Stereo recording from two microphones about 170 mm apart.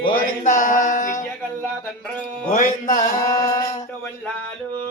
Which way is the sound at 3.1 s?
20° left (ahead or behind).